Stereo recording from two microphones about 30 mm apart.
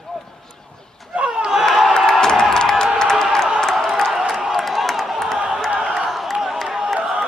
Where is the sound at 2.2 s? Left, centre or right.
Left.